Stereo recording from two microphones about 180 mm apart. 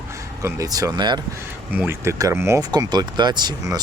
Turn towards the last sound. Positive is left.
turn(degrees=-20)  # may be behind; listen again after turning